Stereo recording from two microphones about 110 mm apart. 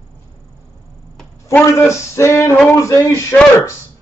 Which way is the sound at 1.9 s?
25° left (ahead or behind).